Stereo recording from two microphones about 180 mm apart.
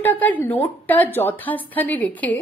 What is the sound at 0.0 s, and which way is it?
Speech, 10° left (ahead or behind).